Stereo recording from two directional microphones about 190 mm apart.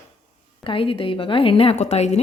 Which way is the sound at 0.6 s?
25° left (ahead or behind).